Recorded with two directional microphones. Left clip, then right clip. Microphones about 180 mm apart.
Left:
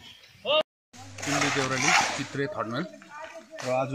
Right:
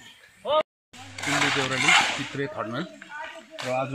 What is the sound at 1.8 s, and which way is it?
Speech, 15° left (ahead or behind).